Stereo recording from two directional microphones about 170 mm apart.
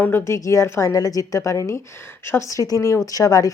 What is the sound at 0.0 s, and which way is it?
A woman's voice, 15° left (ahead or behind).